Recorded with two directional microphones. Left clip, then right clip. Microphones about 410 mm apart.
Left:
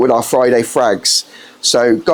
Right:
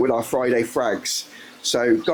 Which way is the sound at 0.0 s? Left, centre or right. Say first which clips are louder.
Left 9 dB; centre.